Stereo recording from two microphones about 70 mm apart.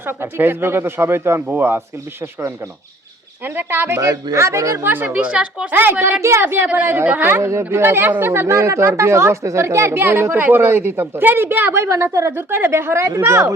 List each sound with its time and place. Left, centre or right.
0.0 s speech: right
3.4 s speech: right
4.0 s speech: right
4.4 s a woman's voice: right
4.8 s speech: right
5.0 s a woman's voice: centre
5.7 s a woman's voice: right